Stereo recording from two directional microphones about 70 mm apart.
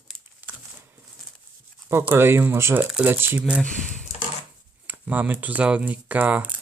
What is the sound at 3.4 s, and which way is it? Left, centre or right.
Speech, centre.